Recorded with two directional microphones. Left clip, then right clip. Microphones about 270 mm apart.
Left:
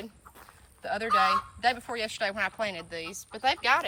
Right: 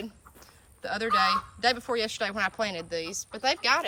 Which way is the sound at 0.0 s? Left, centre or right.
Centre.